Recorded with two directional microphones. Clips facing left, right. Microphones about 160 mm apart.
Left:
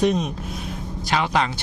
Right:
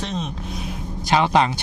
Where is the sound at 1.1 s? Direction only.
20° right (ahead or behind).